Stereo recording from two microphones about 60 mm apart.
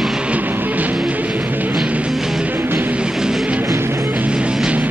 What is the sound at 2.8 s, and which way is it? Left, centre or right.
Music, centre.